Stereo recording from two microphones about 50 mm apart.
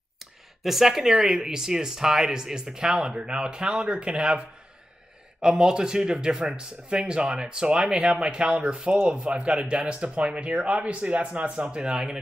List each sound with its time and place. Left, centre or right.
0.7 s speech: centre
5.4 s speech: centre